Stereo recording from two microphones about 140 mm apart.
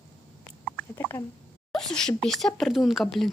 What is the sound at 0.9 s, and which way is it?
Speech, 15° left (ahead or behind).